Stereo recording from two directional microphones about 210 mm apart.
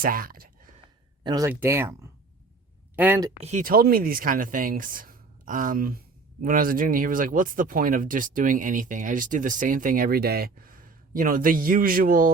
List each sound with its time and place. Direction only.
0.0 s a sound: 45° right (ahead or behind)
1.2 s speech: 20° right (ahead or behind)
1.5 s speech: 10° right (ahead or behind)
3.4 s speech: 40° right (ahead or behind)